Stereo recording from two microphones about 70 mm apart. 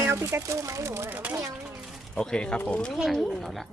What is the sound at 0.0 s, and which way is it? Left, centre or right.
Speech, right.